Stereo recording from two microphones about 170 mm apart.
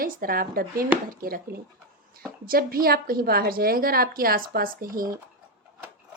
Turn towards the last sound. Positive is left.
turn(degrees=-55)  # may be behind; listen again after turning